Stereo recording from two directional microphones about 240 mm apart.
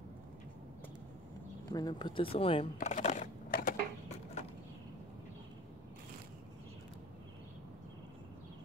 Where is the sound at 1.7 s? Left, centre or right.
Centre; by 3.7 s left.